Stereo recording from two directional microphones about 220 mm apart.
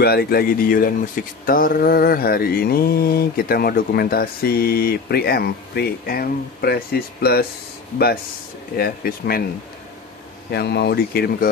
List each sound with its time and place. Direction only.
0.0 s speech: 45° left (ahead or behind)
8.7 s speech: 45° left (ahead or behind)
10.5 s speech: 50° left (ahead or behind)